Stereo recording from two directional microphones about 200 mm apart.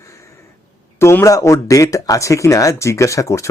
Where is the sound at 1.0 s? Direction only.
15° left (ahead or behind).